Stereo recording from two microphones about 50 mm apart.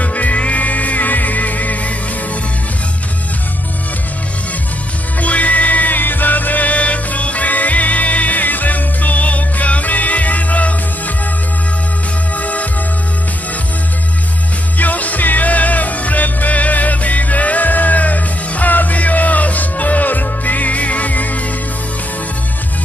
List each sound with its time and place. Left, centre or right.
0.0 s music: left
5.2 s music: left
12.4 s music: left
14.8 s music: left